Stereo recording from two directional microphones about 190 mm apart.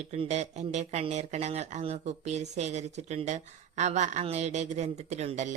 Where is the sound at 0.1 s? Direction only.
35° right (ahead or behind).